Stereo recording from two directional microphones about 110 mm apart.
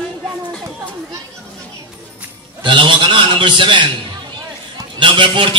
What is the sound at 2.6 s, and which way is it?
A man's voice, 45° right (ahead or behind).